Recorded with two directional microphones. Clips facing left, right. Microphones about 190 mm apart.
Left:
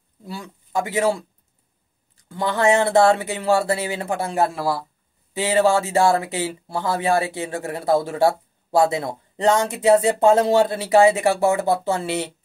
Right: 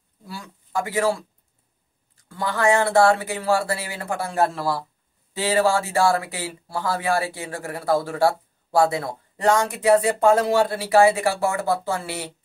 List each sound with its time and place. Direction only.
0.2 s speech: 20° left (ahead or behind)